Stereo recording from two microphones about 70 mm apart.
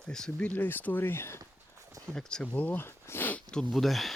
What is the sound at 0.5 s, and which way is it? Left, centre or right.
Speech, left.